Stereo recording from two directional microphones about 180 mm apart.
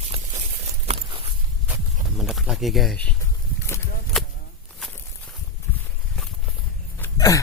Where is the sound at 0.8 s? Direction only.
35° right (ahead or behind).